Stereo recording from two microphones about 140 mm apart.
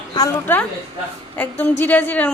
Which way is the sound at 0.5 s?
15° left (ahead or behind).